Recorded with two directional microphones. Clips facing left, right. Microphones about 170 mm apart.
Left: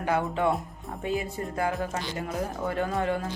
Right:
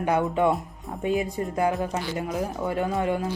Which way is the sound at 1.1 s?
20° right (ahead or behind).